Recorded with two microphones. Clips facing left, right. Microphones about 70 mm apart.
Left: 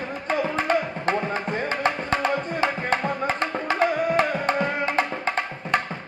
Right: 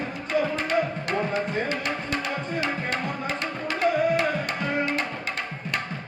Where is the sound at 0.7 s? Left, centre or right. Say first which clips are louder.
Left 2 dB; left.